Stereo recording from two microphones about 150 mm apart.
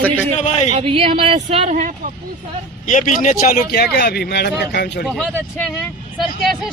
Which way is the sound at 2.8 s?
60° left (ahead or behind).